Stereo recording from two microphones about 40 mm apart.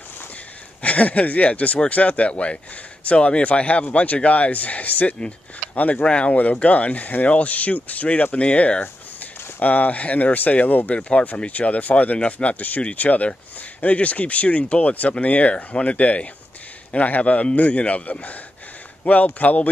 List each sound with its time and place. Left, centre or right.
0.8 s speech: left
6.0 s speech: left
8.8 s speech: left
11.0 s speech: left